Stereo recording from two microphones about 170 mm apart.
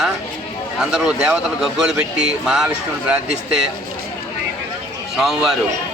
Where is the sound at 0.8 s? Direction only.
5° right (ahead or behind).